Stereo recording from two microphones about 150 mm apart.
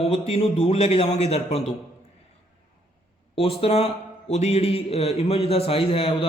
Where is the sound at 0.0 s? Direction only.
40° left (ahead or behind).